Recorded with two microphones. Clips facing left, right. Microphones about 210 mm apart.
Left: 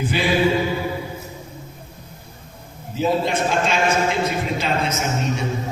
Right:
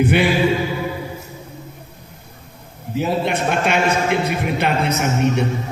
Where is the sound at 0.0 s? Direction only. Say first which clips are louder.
Right 7 dB; 65° right (ahead or behind).